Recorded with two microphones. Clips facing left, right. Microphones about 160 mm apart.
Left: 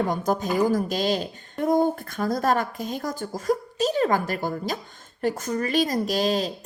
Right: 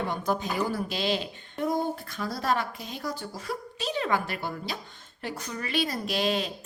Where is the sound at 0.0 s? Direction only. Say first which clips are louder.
Left 5 dB; 45° left (ahead or behind).